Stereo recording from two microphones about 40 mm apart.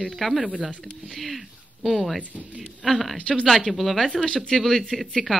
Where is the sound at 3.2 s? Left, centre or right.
Left.